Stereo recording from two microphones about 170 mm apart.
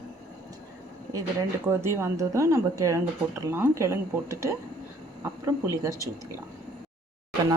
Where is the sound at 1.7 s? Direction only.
15° right (ahead or behind).